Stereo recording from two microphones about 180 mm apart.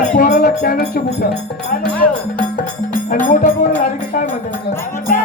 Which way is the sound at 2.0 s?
50° left (ahead or behind).